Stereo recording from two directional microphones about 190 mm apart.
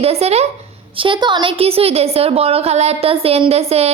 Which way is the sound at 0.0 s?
35° right (ahead or behind).